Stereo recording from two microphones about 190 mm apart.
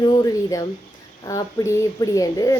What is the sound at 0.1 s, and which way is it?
A woman's voice, 20° left (ahead or behind).